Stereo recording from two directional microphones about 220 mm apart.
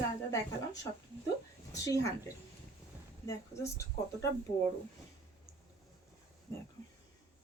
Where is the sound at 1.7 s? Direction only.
15° left (ahead or behind).